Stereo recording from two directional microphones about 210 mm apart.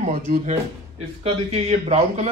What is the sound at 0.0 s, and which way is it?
A man's voice, 35° right (ahead or behind).